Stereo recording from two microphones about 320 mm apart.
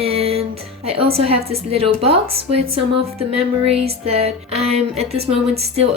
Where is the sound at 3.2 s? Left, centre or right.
Centre.